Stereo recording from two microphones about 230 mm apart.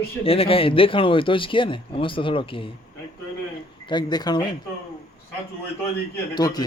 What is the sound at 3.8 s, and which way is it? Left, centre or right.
Speech, centre.